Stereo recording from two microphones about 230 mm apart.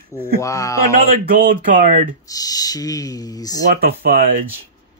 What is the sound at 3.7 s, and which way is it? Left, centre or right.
Speech, right.